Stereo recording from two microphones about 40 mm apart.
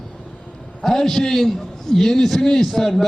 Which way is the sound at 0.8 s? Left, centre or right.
Centre.